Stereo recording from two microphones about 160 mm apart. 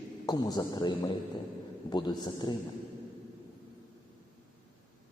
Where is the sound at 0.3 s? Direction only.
25° left (ahead or behind).